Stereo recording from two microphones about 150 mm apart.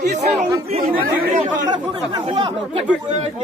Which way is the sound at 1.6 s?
30° right (ahead or behind).